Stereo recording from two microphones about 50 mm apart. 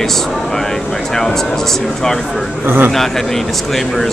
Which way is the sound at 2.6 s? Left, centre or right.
Right.